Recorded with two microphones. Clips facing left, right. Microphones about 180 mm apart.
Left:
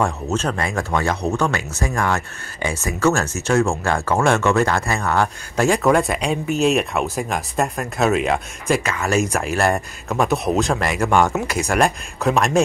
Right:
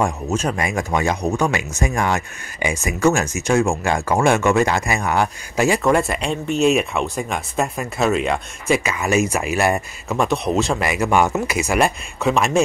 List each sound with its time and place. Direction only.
0.0 s speech: 10° right (ahead or behind)